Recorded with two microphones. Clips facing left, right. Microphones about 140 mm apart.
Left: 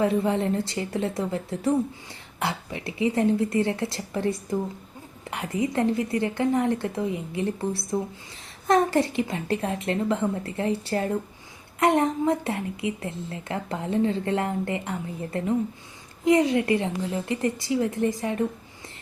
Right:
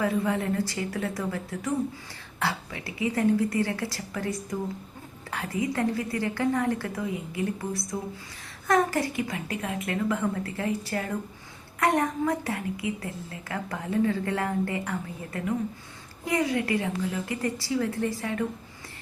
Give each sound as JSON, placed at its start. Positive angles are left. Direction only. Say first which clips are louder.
{"t": 0.0, "sound": "a woman's voice", "louder": "left 4 dB", "side_deg": 25}